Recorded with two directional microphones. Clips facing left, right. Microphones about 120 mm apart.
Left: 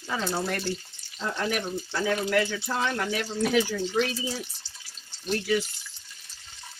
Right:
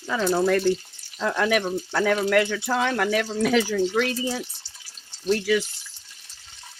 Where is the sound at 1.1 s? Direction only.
80° right.